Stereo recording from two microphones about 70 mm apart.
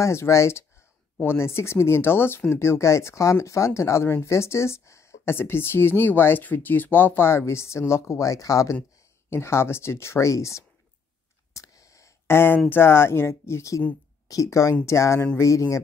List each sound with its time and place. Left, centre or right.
0.0 s speech: left
9.3 s speech: left
11.5 s a sound: left
12.3 s speech: left
14.2 s speech: left